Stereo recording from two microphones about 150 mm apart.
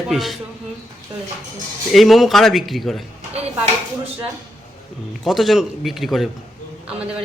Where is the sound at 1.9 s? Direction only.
Centre (ahead or behind).